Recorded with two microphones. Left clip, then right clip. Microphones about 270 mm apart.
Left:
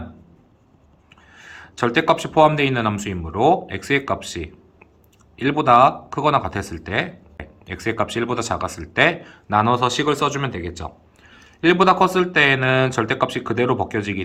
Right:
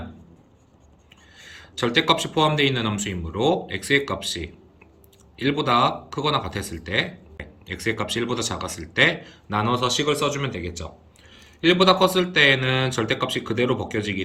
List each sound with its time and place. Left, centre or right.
1.1 s speech: centre